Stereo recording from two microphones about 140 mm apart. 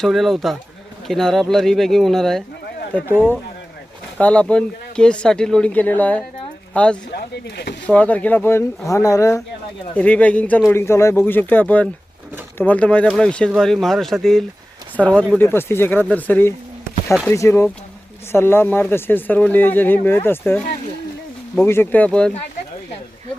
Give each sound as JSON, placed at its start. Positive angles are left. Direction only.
{"t": 0.0, "sound": "speech", "side_deg": 0}
{"t": 4.2, "sound": "speech", "side_deg": 10}
{"t": 9.9, "sound": "speech", "side_deg": 10}
{"t": 15.4, "sound": "speech", "side_deg": 15}
{"t": 21.6, "sound": "speech", "side_deg": 15}